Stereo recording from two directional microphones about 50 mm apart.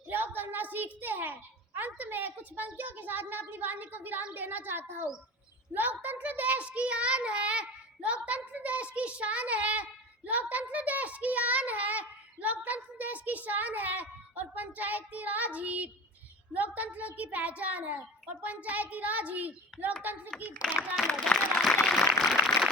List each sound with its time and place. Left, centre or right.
0.1 s a sound: right
2.7 s a child's voice: right
20.3 s speech: left
20.7 s speech: centre
21.1 s speech: centre
21.8 s a sound: centre